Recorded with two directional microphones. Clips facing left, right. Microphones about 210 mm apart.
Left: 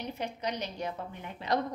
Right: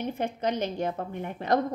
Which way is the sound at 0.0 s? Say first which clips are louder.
Right 6 dB; 50° right (ahead or behind).